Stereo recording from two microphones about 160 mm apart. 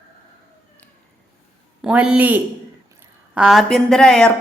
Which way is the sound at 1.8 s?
5° right (ahead or behind).